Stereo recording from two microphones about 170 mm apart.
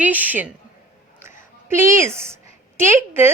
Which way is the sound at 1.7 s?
15° right (ahead or behind).